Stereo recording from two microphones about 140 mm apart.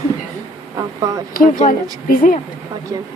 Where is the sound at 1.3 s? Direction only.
80° left.